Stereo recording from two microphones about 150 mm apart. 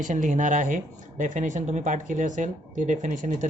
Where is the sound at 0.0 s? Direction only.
55° right (ahead or behind).